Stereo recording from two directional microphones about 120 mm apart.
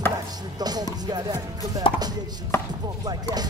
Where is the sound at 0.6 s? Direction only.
35° right (ahead or behind).